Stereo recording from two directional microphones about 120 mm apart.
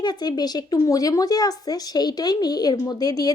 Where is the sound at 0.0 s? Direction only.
35° left (ahead or behind).